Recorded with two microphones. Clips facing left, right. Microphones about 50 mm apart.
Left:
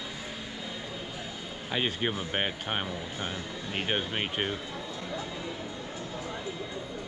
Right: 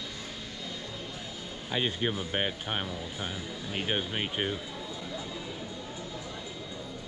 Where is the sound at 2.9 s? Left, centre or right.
Centre.